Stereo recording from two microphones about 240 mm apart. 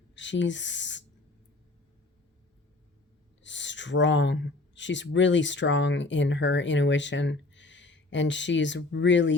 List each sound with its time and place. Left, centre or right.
0.2 s speech: left
3.4 s speech: left